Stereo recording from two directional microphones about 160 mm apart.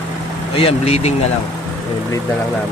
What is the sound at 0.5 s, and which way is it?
Speech, 35° left (ahead or behind).